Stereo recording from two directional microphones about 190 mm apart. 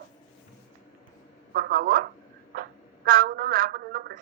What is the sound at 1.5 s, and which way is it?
A woman's voice, 50° right (ahead or behind).